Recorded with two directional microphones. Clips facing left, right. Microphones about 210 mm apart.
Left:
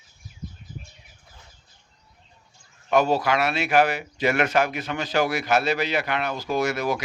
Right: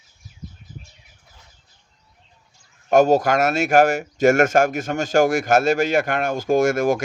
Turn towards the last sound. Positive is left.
turn(degrees=-50)  # may be behind; listen again after turning